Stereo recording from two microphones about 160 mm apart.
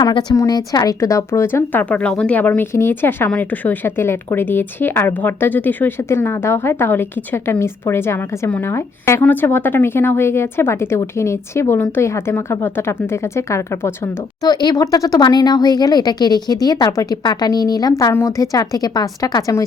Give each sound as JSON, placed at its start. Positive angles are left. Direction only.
{"t": 0.0, "sound": "a woman's voice", "side_deg": 25}